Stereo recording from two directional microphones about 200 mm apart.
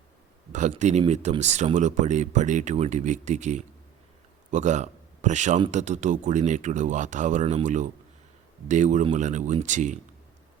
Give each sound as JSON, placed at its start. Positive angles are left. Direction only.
{"t": 0.7, "sound": "speech", "side_deg": -35}